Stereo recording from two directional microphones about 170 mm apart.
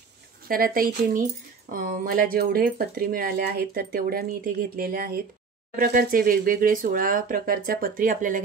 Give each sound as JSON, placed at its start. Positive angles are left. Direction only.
{"t": 0.5, "sound": "speech", "side_deg": -60}